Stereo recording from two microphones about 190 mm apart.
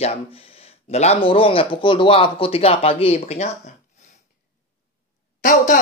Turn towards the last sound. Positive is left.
turn(degrees=40)  # may be behind; listen again after turning